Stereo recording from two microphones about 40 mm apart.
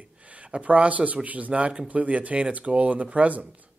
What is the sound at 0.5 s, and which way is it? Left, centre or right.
Speech, right.